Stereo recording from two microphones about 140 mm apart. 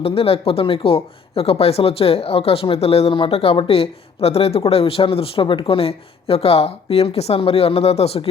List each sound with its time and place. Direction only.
0.0 s speech: 40° left (ahead or behind)